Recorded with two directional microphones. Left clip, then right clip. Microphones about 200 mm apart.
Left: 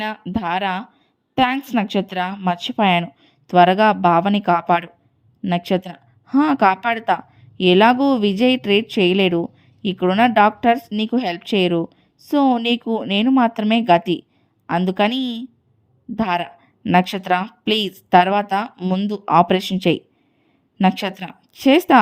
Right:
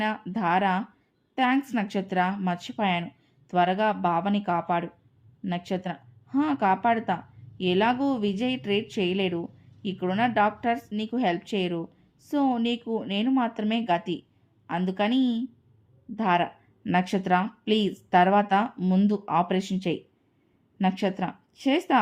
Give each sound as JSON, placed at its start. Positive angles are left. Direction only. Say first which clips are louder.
{"t": 0.0, "sound": "a woman's voice", "louder": "left 3 dB", "side_deg": 40}